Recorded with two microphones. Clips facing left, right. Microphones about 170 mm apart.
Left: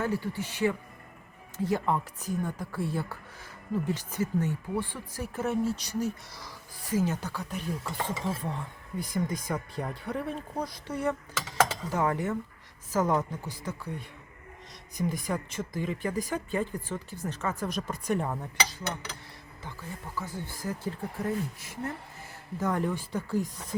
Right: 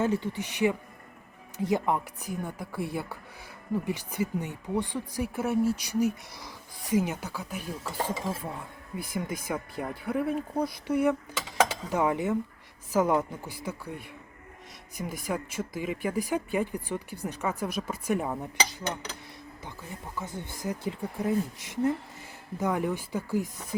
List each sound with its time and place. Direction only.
0.0 s speech: 20° right (ahead or behind)
14.9 s speech: 5° right (ahead or behind)
20.1 s speech: 20° right (ahead or behind)